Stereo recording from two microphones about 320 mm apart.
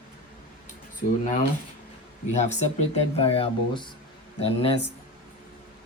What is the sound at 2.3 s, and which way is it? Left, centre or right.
Speech, left.